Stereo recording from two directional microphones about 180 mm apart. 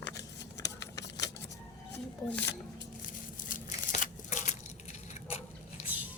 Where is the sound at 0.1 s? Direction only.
20° left (ahead or behind).